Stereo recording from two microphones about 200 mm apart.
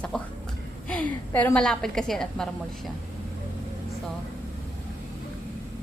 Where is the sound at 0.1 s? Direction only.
5° left (ahead or behind).